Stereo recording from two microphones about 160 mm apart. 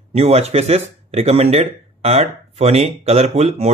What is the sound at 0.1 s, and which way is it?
Speech, 40° right (ahead or behind).